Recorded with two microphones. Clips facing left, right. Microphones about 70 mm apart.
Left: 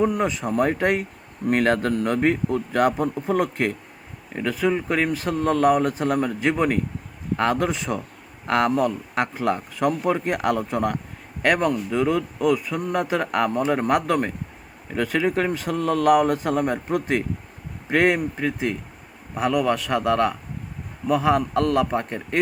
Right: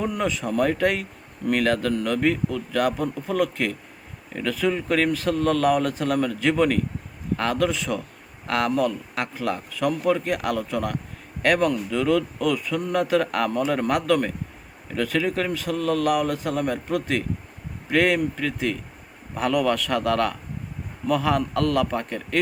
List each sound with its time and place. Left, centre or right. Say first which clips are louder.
0.0 s a man's voice: left 3 dB; left